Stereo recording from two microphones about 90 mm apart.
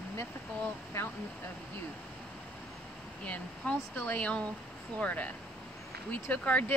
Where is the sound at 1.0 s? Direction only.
25° left (ahead or behind).